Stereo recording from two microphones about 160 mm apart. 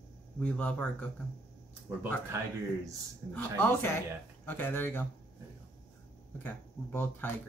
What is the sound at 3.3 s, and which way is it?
Speech, 10° left (ahead or behind).